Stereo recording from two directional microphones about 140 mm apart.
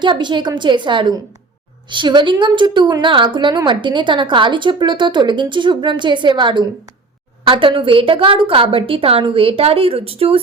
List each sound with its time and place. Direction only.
0.0 s a woman's voice: 35° right (ahead or behind)